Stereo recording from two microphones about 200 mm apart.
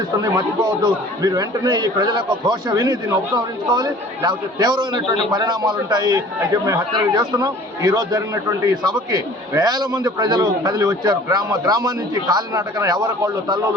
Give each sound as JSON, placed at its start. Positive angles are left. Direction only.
{"t": 0.2, "sound": "speech", "side_deg": -20}